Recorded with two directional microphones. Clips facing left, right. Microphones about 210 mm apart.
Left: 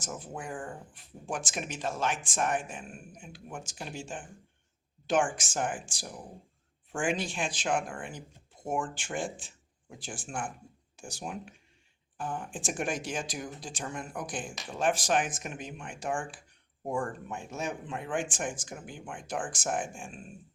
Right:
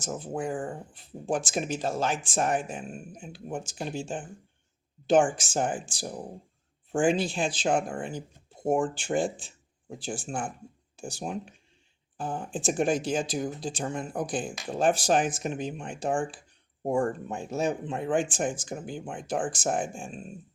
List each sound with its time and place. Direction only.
0.0 s speech: 35° right (ahead or behind)
8.6 s speech: 40° right (ahead or behind)
9.9 s speech: 25° right (ahead or behind)
14.3 s speech: 40° right (ahead or behind)